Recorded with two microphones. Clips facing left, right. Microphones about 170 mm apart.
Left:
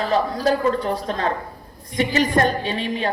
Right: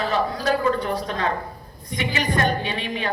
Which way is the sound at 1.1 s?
35° left (ahead or behind).